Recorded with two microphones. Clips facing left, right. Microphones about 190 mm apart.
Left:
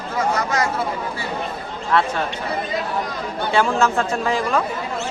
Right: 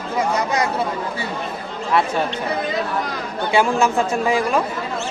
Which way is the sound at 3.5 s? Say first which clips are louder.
Right 1 dB; 15° right (ahead or behind).